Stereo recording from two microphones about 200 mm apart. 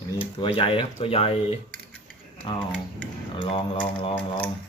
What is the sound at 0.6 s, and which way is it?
Speech, 25° left (ahead or behind).